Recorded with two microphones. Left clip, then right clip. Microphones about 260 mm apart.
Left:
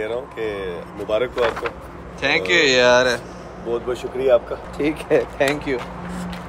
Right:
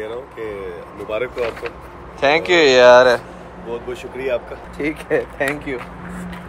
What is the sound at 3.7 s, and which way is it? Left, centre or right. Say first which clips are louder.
Speech: left 4 dB; left.